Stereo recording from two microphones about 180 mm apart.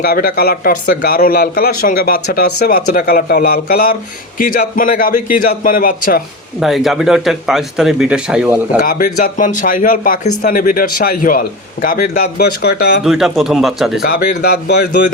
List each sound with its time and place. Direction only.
0.0 s speech: 60° left (ahead or behind)
6.6 s speech: centre (ahead or behind)
8.8 s speech: 50° left (ahead or behind)
13.1 s speech: centre (ahead or behind)
14.0 s speech: 60° left (ahead or behind)